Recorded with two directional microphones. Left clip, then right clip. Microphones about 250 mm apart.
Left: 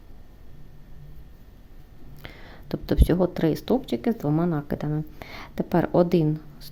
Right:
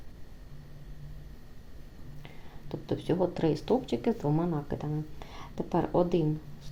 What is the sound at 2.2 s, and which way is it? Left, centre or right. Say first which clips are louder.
Speech: left 9 dB; left.